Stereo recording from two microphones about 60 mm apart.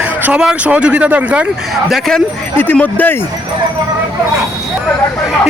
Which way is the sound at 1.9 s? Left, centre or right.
Centre.